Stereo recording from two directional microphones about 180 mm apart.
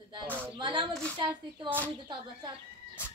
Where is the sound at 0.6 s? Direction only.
25° right (ahead or behind).